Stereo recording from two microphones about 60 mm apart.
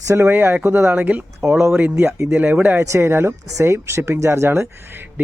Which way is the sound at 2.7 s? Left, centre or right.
Right.